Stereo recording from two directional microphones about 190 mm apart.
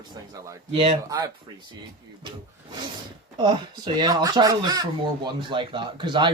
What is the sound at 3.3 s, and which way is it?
Speech, 25° right (ahead or behind).